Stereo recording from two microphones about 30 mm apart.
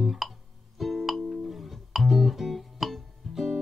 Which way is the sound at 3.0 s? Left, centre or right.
Centre.